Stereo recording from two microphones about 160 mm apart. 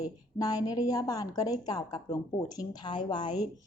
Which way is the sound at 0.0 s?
25° left (ahead or behind).